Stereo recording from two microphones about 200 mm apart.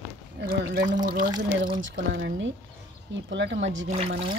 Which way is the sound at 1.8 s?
65° right (ahead or behind).